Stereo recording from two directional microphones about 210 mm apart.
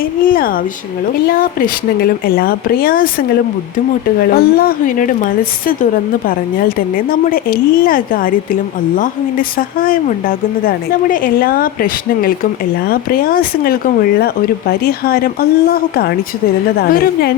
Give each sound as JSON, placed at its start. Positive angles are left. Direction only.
{"t": 0.0, "sound": "speech", "side_deg": 45}